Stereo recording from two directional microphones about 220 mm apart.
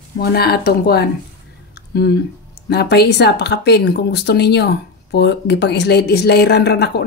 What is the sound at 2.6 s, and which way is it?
Speech, 50° left (ahead or behind).